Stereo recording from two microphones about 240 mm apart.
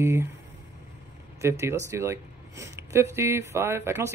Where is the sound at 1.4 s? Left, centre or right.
Centre.